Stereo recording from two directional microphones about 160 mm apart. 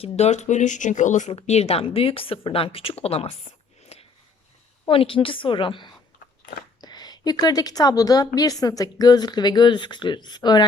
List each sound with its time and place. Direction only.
0.0 s speech: 45° left (ahead or behind)
3.9 s a sound: 40° left (ahead or behind)
4.9 s a woman's voice: 35° left (ahead or behind)